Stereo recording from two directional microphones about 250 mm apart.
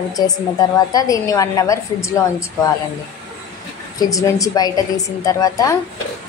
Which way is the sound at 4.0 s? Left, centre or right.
Centre.